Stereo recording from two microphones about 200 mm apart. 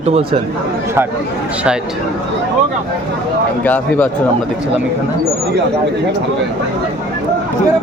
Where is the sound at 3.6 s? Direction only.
10° left (ahead or behind).